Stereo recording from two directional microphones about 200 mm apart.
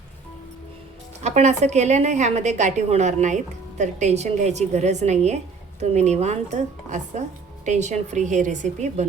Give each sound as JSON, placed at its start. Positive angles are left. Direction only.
{"t": 1.2, "sound": "a woman's voice", "side_deg": -35}